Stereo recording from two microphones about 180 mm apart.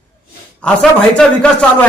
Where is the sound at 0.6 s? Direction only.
5° left (ahead or behind).